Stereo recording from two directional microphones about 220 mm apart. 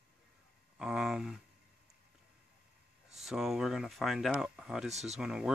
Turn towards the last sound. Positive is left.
turn(degrees=-5)  # may be behind; listen again after turning